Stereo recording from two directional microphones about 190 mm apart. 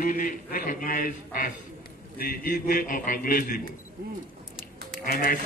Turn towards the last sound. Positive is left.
turn(degrees=50)  # may be behind; listen again after turning